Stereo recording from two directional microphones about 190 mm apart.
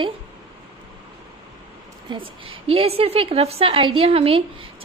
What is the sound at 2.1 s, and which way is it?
A woman's voice, 25° right (ahead or behind).